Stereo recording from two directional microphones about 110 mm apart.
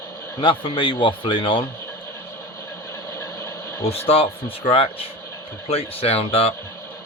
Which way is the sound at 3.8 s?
65° left (ahead or behind).